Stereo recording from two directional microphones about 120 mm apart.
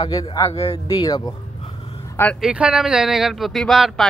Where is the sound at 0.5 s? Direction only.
55° left (ahead or behind).